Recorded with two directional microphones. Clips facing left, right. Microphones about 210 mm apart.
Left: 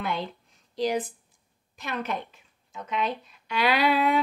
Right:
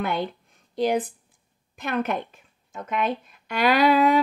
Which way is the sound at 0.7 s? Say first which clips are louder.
Right 4 dB; 55° right (ahead or behind).